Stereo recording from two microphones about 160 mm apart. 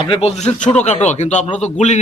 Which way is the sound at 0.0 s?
35° left (ahead or behind).